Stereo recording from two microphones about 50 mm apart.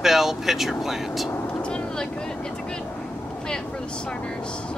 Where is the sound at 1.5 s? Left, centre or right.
Left.